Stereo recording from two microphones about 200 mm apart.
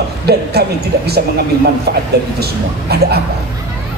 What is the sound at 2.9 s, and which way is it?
Speech, 55° right (ahead or behind).